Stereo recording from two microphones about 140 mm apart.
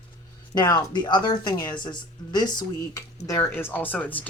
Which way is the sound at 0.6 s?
25° left (ahead or behind).